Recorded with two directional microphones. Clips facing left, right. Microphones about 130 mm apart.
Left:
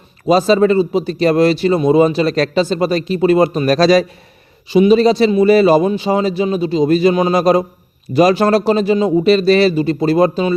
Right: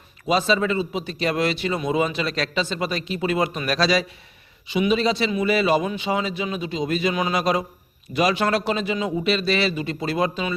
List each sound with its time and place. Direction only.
0.3 s a man's voice: 40° left (ahead or behind)